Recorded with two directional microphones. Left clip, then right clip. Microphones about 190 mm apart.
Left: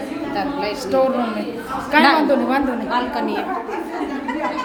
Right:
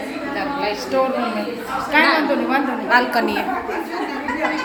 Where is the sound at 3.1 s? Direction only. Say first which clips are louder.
Right 3 dB; 45° right (ahead or behind).